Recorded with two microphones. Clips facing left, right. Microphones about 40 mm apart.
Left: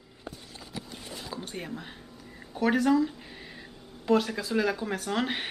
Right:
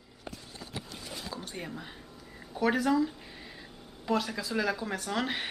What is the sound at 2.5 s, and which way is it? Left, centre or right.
Speech, centre.